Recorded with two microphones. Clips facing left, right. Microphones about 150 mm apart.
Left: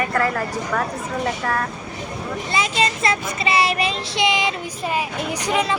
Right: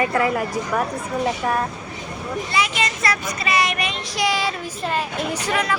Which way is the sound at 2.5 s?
25° left (ahead or behind).